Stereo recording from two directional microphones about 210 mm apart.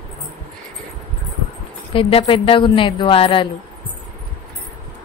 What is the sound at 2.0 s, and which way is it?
A woman's voice, 25° left (ahead or behind).